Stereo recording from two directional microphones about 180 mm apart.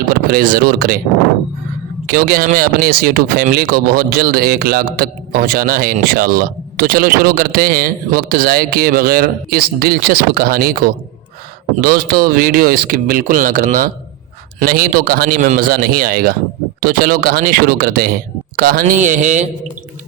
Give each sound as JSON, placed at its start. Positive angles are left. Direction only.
{"t": 0.1, "sound": "speech", "side_deg": -55}
{"t": 2.0, "sound": "speech", "side_deg": -55}